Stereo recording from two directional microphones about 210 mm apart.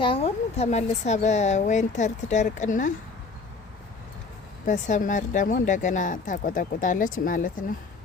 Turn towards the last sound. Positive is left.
turn(degrees=40)  # may be behind; listen again after turning